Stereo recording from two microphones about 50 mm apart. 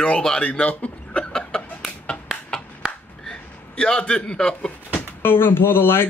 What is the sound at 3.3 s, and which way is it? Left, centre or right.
A man's voice, centre.